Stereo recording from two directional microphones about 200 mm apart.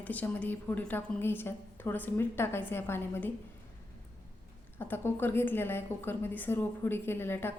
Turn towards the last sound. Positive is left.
turn(degrees=10)  # may be behind; listen again after turning